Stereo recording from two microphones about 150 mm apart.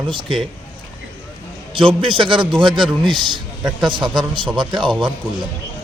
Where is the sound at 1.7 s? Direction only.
35° right (ahead or behind).